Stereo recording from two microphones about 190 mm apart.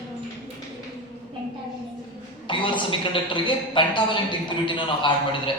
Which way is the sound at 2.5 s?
25° left (ahead or behind).